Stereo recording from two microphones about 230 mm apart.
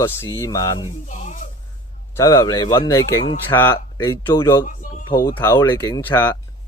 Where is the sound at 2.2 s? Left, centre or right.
Centre.